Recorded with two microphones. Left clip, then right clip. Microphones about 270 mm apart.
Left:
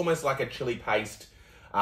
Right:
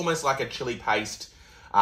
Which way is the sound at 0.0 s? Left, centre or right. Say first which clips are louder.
Right 2 dB; centre.